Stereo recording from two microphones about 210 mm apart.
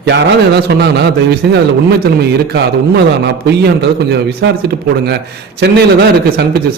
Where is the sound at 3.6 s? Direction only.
50° right (ahead or behind).